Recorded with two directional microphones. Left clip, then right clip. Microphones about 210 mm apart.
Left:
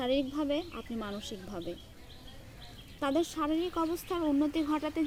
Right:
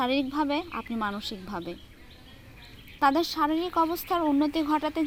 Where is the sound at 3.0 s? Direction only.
30° right (ahead or behind).